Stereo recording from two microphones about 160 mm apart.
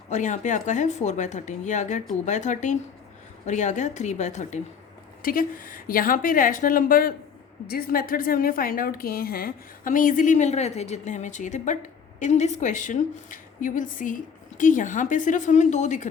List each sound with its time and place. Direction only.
0.1 s a woman's voice: 50° left (ahead or behind)
5.2 s a woman's voice: 60° left (ahead or behind)